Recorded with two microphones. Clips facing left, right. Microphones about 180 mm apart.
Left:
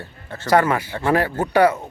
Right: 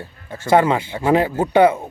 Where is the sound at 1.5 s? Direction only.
25° right (ahead or behind).